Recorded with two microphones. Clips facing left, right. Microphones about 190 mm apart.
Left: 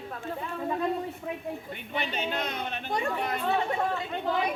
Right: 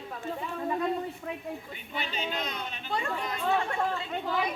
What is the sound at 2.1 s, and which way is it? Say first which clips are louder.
Speech: left 1 dB; 50° left (ahead or behind).